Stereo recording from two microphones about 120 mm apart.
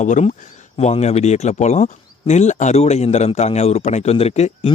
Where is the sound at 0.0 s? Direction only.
85° left.